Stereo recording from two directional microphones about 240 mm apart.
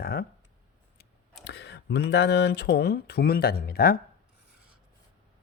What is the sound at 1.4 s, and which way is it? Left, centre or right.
Speech, left.